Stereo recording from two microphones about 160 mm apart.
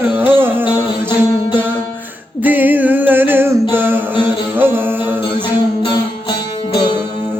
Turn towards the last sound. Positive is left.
turn(degrees=30)  # may be behind; listen again after turning